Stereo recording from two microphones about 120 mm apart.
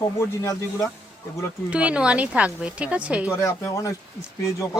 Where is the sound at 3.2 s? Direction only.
25° left (ahead or behind).